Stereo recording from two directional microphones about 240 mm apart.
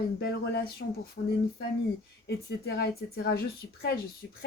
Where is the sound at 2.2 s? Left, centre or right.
Left.